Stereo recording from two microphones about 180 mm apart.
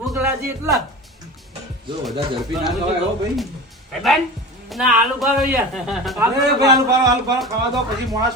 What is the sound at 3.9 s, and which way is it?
Speech, centre (ahead or behind).